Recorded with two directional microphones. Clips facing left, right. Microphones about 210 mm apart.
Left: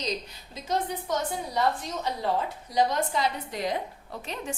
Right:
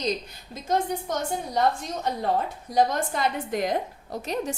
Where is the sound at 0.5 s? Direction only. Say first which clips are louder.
Right 4 dB; 50° right (ahead or behind).